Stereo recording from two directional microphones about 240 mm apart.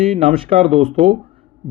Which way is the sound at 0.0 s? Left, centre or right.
Right.